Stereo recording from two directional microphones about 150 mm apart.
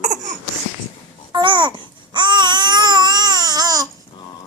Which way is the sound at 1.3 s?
30° right (ahead or behind).